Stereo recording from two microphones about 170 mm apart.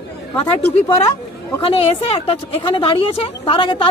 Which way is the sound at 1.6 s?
35° left (ahead or behind).